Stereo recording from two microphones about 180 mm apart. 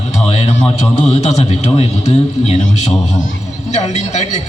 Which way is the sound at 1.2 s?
40° left (ahead or behind).